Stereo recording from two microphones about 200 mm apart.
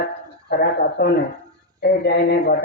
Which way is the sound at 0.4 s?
55° left (ahead or behind).